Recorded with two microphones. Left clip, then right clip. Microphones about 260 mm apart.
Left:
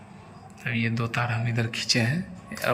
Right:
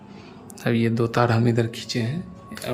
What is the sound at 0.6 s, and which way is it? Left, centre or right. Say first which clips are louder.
Speech: right 6 dB; centre.